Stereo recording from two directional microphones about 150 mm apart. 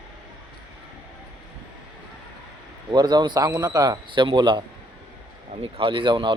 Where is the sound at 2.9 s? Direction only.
30° right (ahead or behind).